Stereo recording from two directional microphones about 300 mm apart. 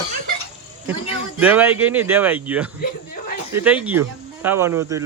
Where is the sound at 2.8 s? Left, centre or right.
Left.